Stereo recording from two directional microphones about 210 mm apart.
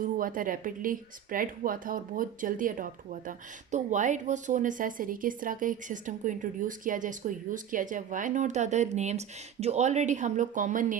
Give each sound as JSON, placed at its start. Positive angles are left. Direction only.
{"t": 0.0, "sound": "speech", "side_deg": -40}